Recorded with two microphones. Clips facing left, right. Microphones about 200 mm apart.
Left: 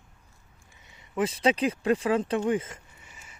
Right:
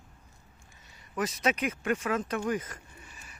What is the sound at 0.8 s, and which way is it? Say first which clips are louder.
Speech: left 5 dB; 20° left (ahead or behind).